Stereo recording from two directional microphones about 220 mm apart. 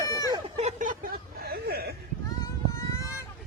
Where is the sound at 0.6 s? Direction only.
35° right (ahead or behind).